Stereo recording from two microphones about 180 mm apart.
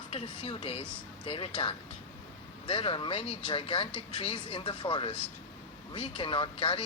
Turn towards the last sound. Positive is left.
turn(degrees=30)  # may be behind; listen again after turning